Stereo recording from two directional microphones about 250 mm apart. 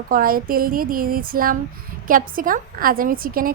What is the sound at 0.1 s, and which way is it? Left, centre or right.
A woman's voice, right.